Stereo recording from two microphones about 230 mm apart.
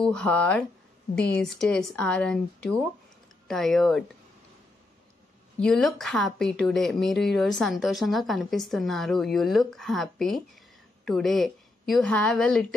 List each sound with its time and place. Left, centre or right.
0.0 s a woman's voice: centre
5.6 s a woman's voice: centre